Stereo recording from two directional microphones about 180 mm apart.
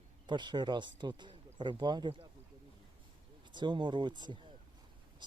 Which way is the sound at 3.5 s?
25° right (ahead or behind).